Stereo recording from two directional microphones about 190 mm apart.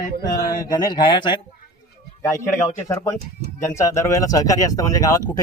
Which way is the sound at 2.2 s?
15° left (ahead or behind).